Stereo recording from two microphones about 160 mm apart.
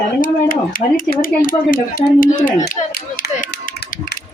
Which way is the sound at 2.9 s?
65° left (ahead or behind).